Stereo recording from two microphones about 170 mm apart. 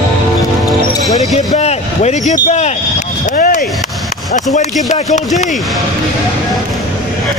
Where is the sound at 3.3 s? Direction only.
50° left (ahead or behind).